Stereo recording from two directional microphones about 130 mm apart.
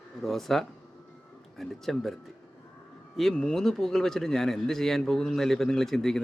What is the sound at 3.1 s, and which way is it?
Speech, 5° left (ahead or behind).